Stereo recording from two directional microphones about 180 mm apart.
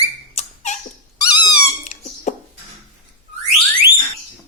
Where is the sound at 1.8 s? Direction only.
40° left (ahead or behind).